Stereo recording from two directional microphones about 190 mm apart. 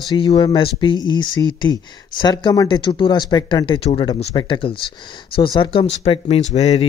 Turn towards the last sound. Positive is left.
turn(degrees=35)  # may be behind; listen again after turning